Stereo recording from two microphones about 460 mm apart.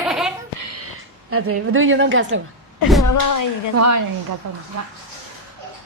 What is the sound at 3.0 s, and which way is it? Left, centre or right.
Speech, left.